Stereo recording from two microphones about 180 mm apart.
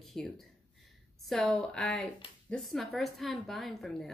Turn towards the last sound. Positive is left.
turn(degrees=0)  # may be behind; listen again after turning